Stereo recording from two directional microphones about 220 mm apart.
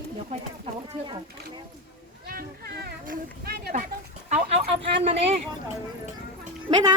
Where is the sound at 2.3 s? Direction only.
45° right (ahead or behind).